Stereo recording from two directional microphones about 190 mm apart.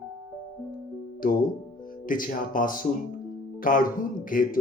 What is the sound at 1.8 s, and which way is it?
Speech, 45° left (ahead or behind).